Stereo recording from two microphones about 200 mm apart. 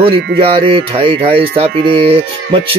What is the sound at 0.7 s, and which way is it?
Speech, 25° right (ahead or behind).